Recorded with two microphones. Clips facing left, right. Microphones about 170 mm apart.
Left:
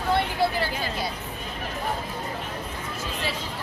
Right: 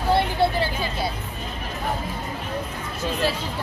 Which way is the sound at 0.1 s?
25° right (ahead or behind).